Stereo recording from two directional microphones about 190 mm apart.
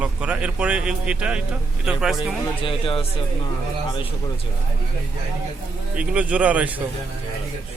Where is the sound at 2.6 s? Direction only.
30° left (ahead or behind).